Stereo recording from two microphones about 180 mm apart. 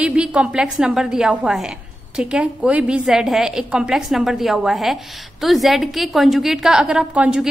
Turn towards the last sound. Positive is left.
turn(degrees=-5)  # may be behind; listen again after turning